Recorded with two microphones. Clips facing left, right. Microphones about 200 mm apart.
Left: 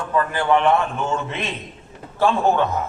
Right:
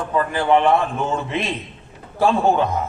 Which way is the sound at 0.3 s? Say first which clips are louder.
Right 2 dB; 30° right (ahead or behind).